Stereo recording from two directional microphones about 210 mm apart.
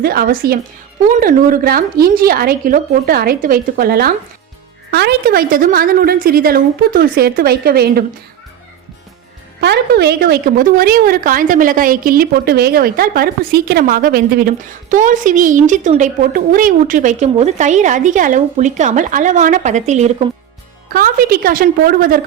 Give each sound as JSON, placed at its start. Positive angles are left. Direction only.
{"t": 0.0, "sound": "a woman's voice", "side_deg": -45}
{"t": 9.6, "sound": "a woman's voice", "side_deg": -50}
{"t": 20.9, "sound": "a woman's voice", "side_deg": -45}